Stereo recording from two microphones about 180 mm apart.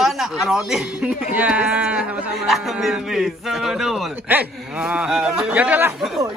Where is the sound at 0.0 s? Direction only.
Centre (ahead or behind).